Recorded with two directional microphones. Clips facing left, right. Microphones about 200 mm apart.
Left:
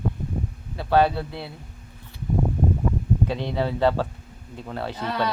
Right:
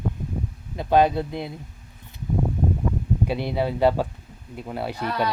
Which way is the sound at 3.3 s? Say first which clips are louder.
Right 1 dB; 10° right (ahead or behind).